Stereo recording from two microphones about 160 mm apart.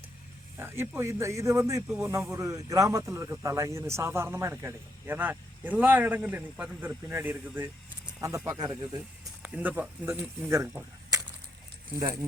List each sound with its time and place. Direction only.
0.5 s a man's voice: 15° right (ahead or behind)
8.4 s speech: 25° right (ahead or behind)
9.4 s a man's voice: 10° right (ahead or behind)